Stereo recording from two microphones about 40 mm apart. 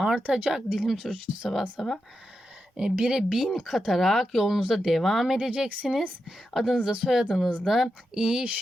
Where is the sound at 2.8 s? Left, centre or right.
Centre.